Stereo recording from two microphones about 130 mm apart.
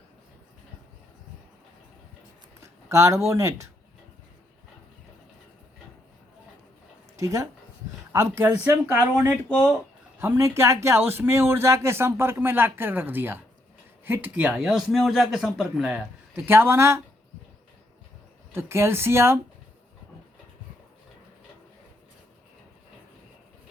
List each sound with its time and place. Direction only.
2.6 s speech: 25° right (ahead or behind)
7.2 s a man's voice: 25° right (ahead or behind)
10.2 s a man's voice: 20° right (ahead or behind)
18.5 s a man's voice: 20° right (ahead or behind)